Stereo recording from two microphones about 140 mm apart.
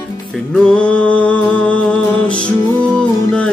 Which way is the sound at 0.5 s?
5° left (ahead or behind).